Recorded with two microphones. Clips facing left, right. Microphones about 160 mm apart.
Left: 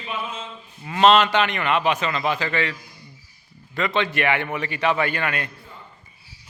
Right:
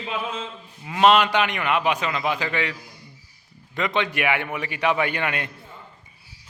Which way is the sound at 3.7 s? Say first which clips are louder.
Left 1 dB; 15° right (ahead or behind).